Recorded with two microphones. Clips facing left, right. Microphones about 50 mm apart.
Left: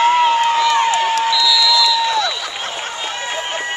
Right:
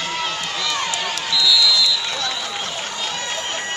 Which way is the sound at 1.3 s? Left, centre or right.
Centre.